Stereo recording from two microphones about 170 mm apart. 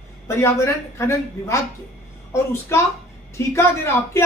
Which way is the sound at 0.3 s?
15° left (ahead or behind).